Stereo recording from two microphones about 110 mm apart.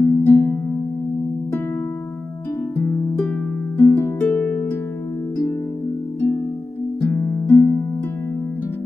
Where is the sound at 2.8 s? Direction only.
20° left (ahead or behind).